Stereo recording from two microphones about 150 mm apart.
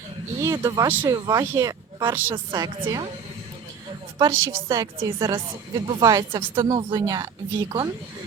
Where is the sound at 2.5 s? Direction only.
30° right (ahead or behind).